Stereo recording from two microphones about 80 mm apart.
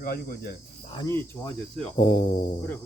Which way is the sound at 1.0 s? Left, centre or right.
Left.